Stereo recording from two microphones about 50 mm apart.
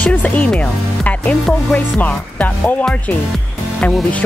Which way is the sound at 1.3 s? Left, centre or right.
Centre.